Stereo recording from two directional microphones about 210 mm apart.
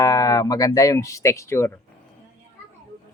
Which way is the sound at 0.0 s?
15° left (ahead or behind).